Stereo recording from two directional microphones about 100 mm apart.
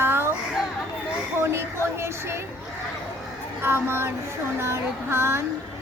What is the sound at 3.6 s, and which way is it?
Speech, 25° right (ahead or behind).